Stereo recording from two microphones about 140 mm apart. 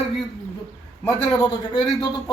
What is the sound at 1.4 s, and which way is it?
Speech, 30° left (ahead or behind).